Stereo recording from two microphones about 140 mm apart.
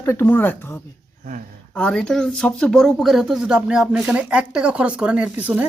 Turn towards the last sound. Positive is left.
turn(degrees=-10)  # may be behind; listen again after turning